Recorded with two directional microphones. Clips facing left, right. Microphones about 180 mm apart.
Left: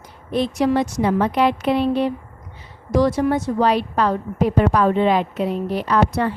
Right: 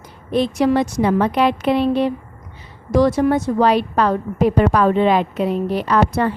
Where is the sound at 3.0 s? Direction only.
60° right (ahead or behind); by 5.3 s 75° right (ahead or behind).